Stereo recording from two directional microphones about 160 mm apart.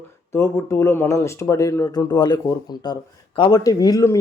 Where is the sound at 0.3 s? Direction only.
15° left (ahead or behind).